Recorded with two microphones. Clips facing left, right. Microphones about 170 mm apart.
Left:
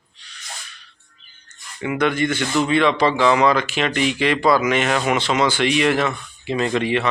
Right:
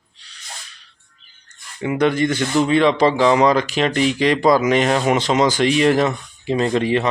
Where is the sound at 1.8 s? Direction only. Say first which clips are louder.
Right 3 dB; 35° right (ahead or behind).